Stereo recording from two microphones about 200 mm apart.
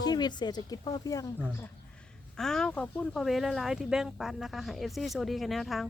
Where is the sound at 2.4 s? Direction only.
Centre (ahead or behind).